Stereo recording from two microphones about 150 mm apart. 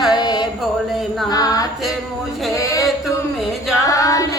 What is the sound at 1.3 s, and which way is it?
Female singing, 25° left (ahead or behind).